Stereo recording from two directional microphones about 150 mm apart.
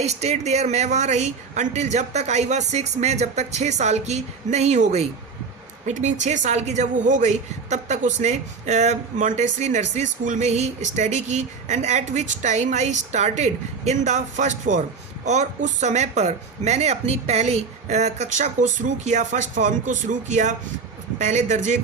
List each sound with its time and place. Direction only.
0.0 s a woman's voice: 45° right (ahead or behind)